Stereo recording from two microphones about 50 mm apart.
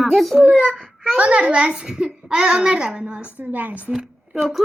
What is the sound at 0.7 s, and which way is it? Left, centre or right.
Speech, centre.